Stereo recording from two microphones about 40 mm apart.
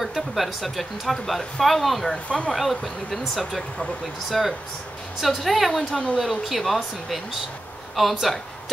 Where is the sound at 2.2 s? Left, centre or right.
Left.